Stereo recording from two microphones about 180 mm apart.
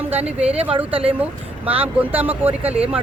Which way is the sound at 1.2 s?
10° right (ahead or behind).